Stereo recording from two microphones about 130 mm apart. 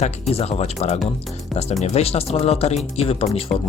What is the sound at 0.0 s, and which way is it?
Speech, 50° left (ahead or behind).